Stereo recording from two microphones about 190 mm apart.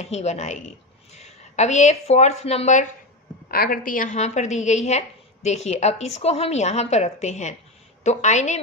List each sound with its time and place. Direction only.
0.0 s a woman's voice: 35° left (ahead or behind)
3.4 s a woman's voice: 50° left (ahead or behind); by 8.5 s 35° left (ahead or behind)